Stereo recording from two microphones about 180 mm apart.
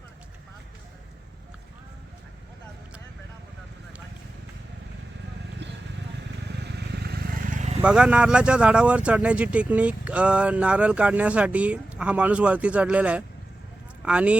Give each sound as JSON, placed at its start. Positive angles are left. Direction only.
{"t": 5.6, "sound": "vehicle", "side_deg": -75}
{"t": 7.8, "sound": "speech", "side_deg": -5}